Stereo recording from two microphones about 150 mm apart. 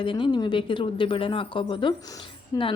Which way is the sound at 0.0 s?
35° left (ahead or behind).